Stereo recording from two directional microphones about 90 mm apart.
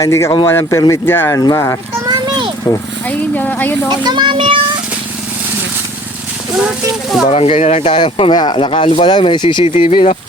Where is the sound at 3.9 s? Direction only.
55° right (ahead or behind).